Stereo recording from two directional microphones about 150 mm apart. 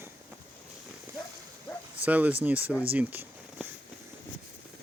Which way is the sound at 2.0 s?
10° right (ahead or behind).